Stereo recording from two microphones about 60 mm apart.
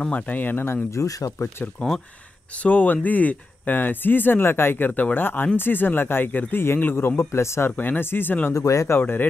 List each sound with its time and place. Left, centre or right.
0.1 s speech: left
0.9 s speech: left
1.8 s speech: centre; by 7.7 s left
7.7 s speech: left
8.5 s speech: left
8.9 s speech: left